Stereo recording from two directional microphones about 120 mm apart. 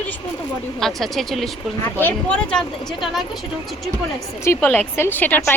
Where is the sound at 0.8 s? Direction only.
Centre (ahead or behind).